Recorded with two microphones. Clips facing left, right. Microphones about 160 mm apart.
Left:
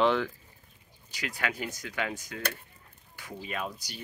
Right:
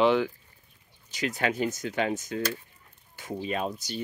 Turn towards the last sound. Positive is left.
turn(degrees=-25)  # may be behind; listen again after turning